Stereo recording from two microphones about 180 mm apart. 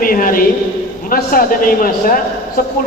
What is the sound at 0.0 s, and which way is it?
A man's voice, 50° left (ahead or behind).